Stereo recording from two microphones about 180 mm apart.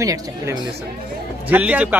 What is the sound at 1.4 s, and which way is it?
Speech, 10° right (ahead or behind).